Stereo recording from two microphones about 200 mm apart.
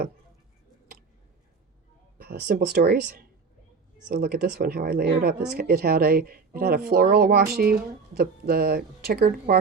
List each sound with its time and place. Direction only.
2.1 s speech: 50° right (ahead or behind)